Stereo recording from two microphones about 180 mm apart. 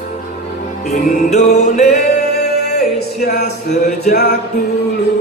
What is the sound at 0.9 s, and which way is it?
Music, 45° left (ahead or behind).